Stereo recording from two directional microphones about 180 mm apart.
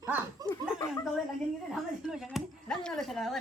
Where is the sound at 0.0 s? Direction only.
20° right (ahead or behind).